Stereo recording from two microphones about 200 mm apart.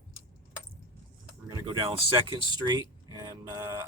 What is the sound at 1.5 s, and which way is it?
Speech, 20° right (ahead or behind).